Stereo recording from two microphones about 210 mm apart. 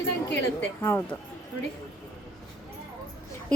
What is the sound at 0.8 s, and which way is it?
Speech, 10° left (ahead or behind).